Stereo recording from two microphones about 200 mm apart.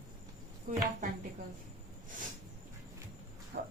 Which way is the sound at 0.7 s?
40° right (ahead or behind).